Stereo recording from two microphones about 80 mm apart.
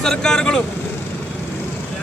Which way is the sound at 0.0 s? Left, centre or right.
Centre.